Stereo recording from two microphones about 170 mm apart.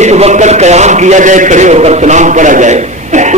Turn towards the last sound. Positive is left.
turn(degrees=-45)  # may be behind; listen again after turning